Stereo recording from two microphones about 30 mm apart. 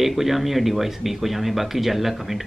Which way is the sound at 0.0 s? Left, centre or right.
Centre.